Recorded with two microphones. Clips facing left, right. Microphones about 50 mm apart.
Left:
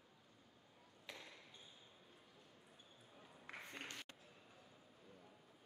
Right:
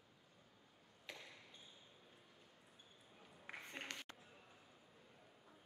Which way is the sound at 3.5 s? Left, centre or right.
Centre.